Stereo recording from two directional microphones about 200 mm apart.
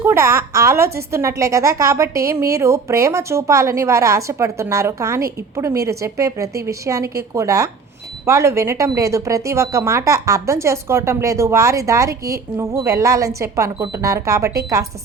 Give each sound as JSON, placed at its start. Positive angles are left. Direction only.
{"t": 0.0, "sound": "speech", "side_deg": -10}